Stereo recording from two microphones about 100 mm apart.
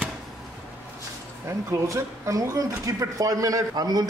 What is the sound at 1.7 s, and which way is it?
Speech, 30° right (ahead or behind).